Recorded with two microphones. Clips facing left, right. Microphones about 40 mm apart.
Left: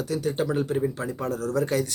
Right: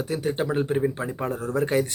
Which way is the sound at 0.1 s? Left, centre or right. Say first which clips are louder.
Even; right.